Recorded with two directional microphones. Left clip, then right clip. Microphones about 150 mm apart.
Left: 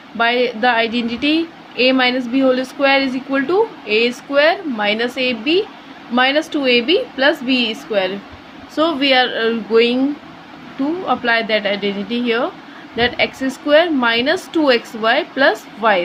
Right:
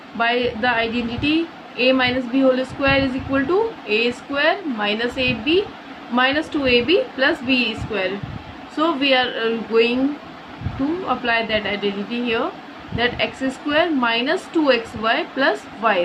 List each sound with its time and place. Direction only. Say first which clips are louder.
0.2 s a woman's voice: left 4 dB; 50° left (ahead or behind)
11.1 s a woman's voice: left 4 dB; 50° left (ahead or behind)